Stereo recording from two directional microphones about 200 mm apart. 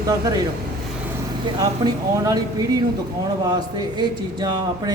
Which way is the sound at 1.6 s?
15° right (ahead or behind).